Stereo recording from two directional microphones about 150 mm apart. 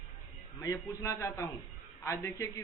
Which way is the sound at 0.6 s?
20° left (ahead or behind).